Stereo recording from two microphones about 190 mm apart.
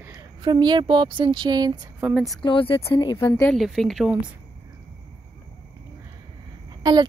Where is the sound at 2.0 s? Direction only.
Centre (ahead or behind).